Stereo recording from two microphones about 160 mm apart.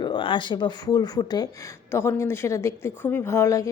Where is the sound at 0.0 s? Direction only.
30° left (ahead or behind).